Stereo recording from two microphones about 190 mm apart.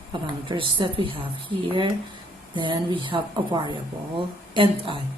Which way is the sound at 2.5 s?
25° right (ahead or behind).